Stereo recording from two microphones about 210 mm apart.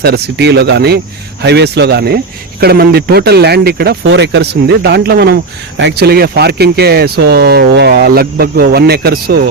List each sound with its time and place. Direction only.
0.0 s speech: 50° right (ahead or behind)